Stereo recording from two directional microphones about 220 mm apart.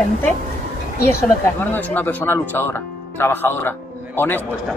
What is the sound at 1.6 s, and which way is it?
Speech, 10° left (ahead or behind).